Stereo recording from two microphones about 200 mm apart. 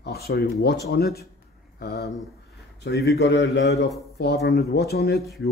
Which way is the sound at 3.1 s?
55° left (ahead or behind).